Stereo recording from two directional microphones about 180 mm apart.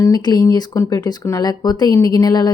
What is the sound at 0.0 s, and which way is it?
Speech, 20° left (ahead or behind).